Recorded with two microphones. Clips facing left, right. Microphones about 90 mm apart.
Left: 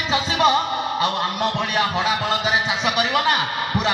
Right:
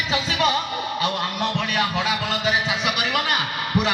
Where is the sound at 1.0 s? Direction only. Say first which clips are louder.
Left 2 dB; 25° left (ahead or behind).